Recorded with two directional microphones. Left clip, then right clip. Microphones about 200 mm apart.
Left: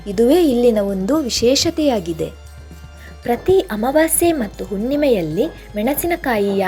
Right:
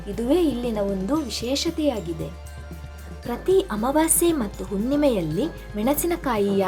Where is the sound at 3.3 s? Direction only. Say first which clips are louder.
Left 6 dB; 10° left (ahead or behind).